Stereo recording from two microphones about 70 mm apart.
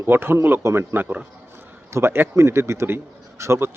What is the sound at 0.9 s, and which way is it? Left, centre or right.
Speech, right.